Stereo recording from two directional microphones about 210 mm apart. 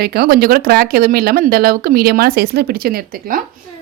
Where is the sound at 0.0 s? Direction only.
50° right (ahead or behind).